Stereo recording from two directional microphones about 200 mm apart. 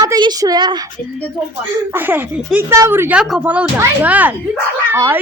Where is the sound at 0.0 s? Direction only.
20° right (ahead or behind).